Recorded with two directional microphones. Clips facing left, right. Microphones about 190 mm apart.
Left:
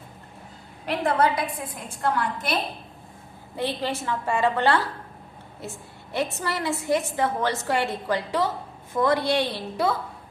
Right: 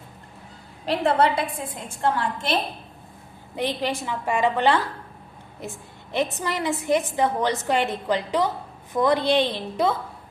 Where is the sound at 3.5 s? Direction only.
15° right (ahead or behind).